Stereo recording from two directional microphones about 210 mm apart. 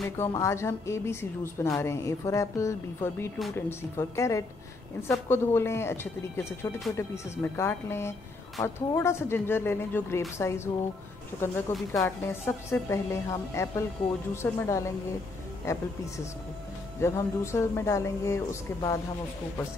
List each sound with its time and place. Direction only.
0.2 s a woman's voice: 15° left (ahead or behind)
11.9 s a woman's voice: 15° left (ahead or behind)
17.0 s a woman's voice: 15° left (ahead or behind)